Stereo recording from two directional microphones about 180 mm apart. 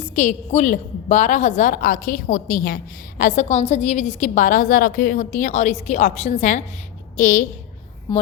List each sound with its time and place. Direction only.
0.0 s a woman's voice: 40° left (ahead or behind)
8.1 s speech: 20° left (ahead or behind)